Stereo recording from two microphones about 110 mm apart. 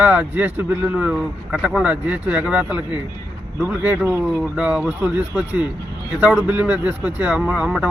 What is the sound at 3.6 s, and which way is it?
A man's voice, 25° right (ahead or behind).